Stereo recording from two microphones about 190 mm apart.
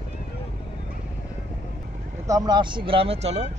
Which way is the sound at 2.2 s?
20° right (ahead or behind).